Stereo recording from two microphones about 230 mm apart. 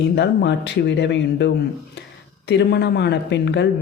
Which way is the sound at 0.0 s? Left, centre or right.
Left.